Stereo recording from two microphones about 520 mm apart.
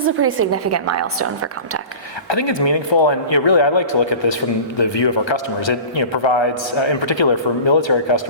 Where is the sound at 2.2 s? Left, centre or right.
Left.